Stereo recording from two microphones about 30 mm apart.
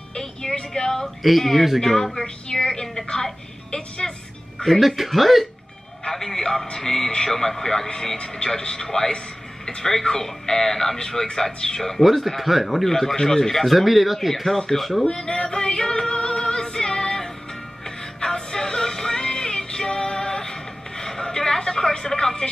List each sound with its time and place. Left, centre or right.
0.2 s a sound: centre
1.2 s a woman's voice: centre
4.6 s speech: centre
6.0 s a man's voice: centre
12.0 s speech: centre
12.8 s speech: centre
13.7 s speech: centre
14.3 s speech: centre
14.8 s speech: centre
15.0 s female singing: left
17.8 s music: centre